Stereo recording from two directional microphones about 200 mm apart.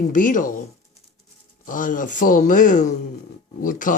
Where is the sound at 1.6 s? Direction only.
40° left (ahead or behind).